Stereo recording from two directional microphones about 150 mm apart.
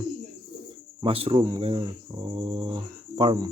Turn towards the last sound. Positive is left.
turn(degrees=-30)  # may be behind; listen again after turning